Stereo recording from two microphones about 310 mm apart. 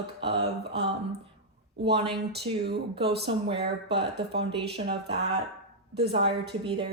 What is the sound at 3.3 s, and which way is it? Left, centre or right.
Speech, centre.